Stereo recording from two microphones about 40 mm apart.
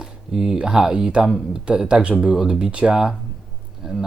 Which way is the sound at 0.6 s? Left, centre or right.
Centre.